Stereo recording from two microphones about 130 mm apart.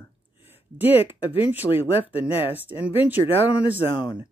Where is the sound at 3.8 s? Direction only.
40° left (ahead or behind).